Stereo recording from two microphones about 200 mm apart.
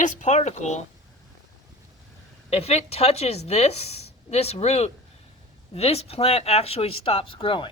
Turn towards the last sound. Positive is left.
turn(degrees=25)  # may be behind; listen again after turning